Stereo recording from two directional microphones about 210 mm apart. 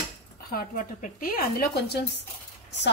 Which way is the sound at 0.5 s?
40° left (ahead or behind).